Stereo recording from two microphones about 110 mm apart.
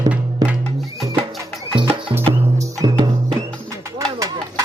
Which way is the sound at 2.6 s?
35° right (ahead or behind).